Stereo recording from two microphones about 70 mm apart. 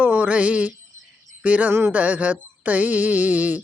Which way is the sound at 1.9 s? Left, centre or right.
Right.